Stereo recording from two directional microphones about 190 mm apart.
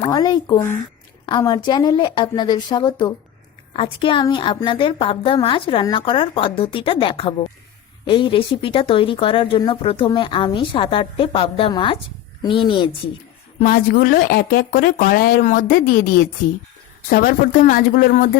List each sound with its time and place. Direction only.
0.1 s speech: 20° left (ahead or behind)
13.6 s speech: 45° left (ahead or behind)